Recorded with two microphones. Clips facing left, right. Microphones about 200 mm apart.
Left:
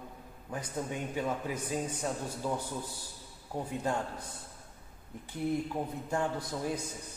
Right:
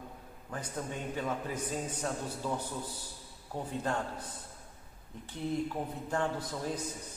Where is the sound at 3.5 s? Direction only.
10° left (ahead or behind).